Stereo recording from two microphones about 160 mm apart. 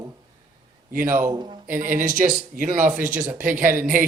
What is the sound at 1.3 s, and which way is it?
Speech, 25° right (ahead or behind).